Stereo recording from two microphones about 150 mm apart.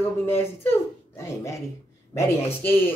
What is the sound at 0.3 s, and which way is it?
A man's voice, 15° left (ahead or behind).